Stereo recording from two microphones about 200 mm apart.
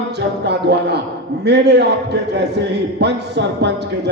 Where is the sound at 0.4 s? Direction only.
55° right (ahead or behind).